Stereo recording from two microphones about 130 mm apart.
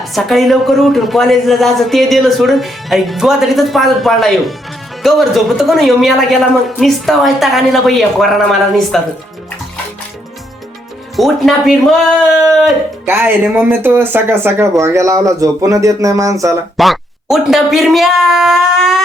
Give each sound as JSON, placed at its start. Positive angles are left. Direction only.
{"t": 0.0, "sound": "a man's voice", "side_deg": 0}
{"t": 11.2, "sound": "a man's voice", "side_deg": 0}
{"t": 13.1, "sound": "speech", "side_deg": -15}
{"t": 16.7, "sound": "speech", "side_deg": 0}